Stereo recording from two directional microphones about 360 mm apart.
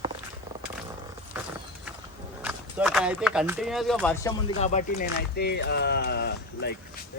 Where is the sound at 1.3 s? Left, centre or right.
Centre.